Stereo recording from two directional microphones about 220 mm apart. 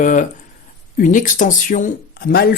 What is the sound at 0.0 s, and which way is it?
Speech, 35° left (ahead or behind).